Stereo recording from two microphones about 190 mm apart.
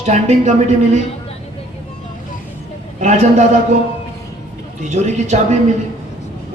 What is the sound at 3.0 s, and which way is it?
Speech, 40° right (ahead or behind).